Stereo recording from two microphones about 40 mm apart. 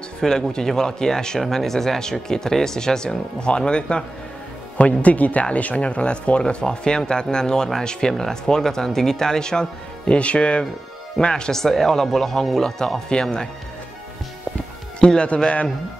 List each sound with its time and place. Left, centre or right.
0.2 s speech: centre
4.7 s speech: left; by 10.1 s centre
10.1 s speech: left
15.0 s speech: left